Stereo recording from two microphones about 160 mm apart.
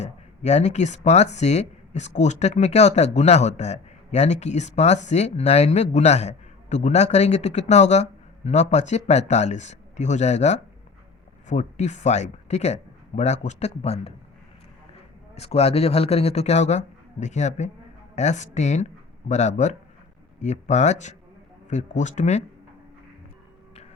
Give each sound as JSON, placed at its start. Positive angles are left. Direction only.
{"t": 0.0, "sound": "speech", "side_deg": 45}
{"t": 15.4, "sound": "speech", "side_deg": 40}